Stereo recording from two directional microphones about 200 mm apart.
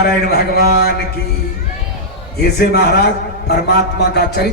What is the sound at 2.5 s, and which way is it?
A man's voice, 50° left (ahead or behind).